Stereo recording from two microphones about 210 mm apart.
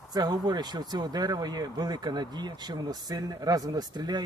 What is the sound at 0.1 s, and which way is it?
Speech, 20° right (ahead or behind).